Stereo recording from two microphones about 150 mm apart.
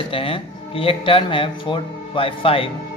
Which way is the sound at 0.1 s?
40° left (ahead or behind).